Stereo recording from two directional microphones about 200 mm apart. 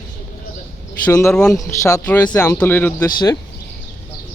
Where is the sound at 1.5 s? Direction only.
15° left (ahead or behind).